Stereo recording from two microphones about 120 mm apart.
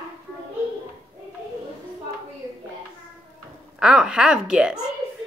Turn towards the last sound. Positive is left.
turn(degrees=-5)  # may be behind; listen again after turning